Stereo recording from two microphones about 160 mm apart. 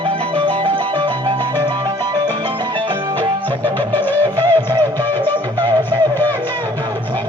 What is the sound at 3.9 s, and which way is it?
Music, 10° left (ahead or behind).